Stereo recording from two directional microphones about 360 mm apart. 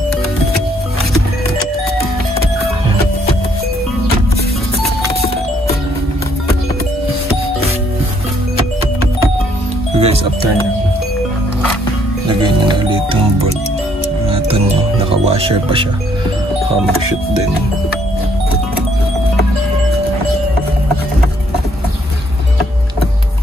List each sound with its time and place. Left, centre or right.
9.9 s music: centre
12.3 s music: centre
15.2 s speech: centre